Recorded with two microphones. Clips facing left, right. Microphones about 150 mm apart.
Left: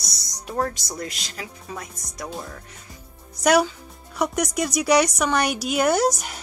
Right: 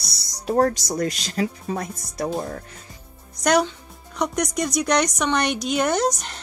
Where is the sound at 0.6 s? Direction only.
45° right (ahead or behind).